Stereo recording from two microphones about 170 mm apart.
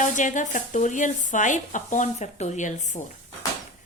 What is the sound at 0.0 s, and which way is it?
Speech, 45° left (ahead or behind).